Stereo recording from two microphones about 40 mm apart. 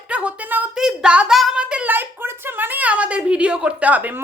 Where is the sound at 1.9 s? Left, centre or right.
Right.